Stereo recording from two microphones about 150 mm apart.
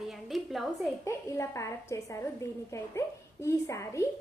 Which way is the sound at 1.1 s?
20° left (ahead or behind).